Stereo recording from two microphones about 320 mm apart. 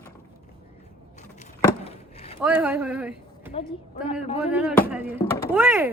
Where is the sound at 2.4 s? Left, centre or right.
Centre.